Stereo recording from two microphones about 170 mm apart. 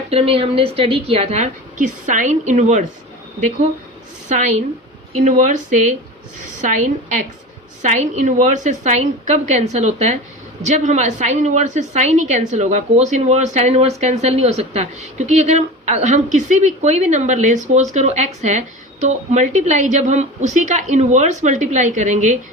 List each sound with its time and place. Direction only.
0.1 s a woman's voice: 35° right (ahead or behind)
4.3 s a woman's voice: 45° right (ahead or behind)
6.6 s a woman's voice: 45° right (ahead or behind)